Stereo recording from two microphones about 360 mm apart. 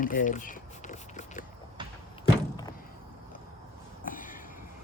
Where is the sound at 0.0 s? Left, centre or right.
Left.